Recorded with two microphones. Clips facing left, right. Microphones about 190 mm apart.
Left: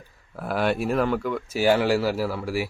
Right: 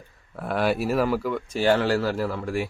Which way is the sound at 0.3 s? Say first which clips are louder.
Even; centre (ahead or behind).